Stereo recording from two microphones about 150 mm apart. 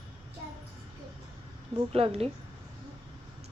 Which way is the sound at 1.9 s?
40° right (ahead or behind).